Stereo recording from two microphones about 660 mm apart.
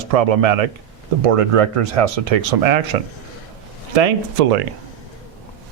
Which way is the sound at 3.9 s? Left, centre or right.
Right.